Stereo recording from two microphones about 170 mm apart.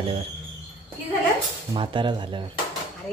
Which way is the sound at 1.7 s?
30° right (ahead or behind).